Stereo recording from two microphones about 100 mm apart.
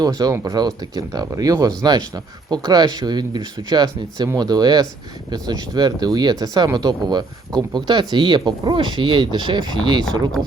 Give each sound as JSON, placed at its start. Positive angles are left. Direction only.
{"t": 0.0, "sound": "speech", "side_deg": -40}